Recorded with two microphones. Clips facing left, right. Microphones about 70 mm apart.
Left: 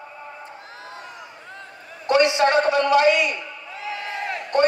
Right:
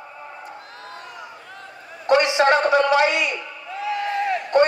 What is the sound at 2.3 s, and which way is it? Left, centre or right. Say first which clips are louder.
Speech: right 2 dB; right.